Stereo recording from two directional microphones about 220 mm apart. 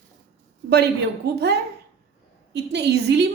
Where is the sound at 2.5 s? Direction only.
50° right (ahead or behind).